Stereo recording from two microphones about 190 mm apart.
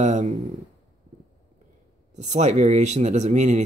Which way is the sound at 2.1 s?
40° right (ahead or behind).